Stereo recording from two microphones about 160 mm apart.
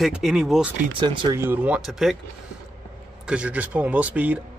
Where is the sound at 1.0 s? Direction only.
30° right (ahead or behind).